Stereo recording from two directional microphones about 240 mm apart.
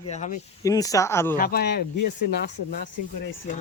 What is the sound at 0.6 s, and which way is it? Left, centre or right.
Speech, centre.